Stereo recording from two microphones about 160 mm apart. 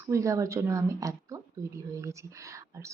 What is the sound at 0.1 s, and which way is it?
Speech, 20° right (ahead or behind).